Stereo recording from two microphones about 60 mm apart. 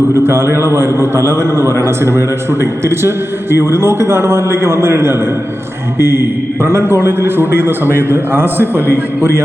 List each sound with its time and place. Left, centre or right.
0.2 s a man's voice: right
6.6 s a man's voice: right